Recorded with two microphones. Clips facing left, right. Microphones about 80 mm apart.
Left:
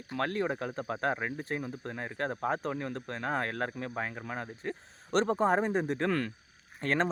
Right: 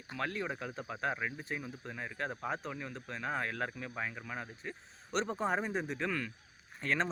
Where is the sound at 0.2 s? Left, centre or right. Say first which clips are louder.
Left 6 dB; left.